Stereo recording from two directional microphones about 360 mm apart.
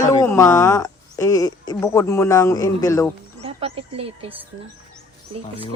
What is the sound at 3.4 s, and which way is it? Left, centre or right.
Speech, centre.